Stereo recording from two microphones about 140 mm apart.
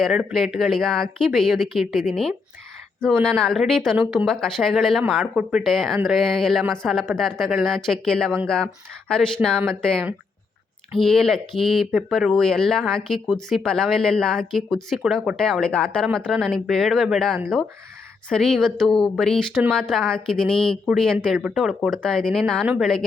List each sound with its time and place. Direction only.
0.0 s speech: 5° right (ahead or behind)